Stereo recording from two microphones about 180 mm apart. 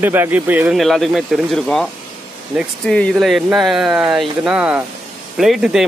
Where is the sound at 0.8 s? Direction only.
Centre (ahead or behind).